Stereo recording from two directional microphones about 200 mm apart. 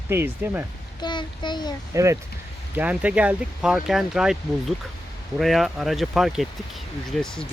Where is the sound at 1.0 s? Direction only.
20° left (ahead or behind).